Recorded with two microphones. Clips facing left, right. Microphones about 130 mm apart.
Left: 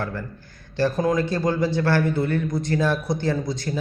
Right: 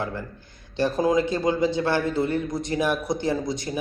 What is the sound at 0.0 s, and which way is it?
A man's voice, 20° right (ahead or behind).